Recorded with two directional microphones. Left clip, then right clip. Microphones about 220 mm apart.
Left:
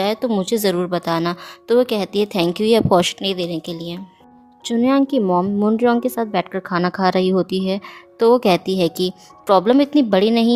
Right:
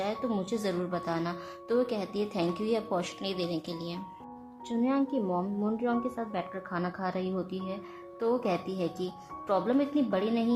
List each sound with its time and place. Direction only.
0.0 s speech: 45° left (ahead or behind)
4.6 s speech: 45° left (ahead or behind)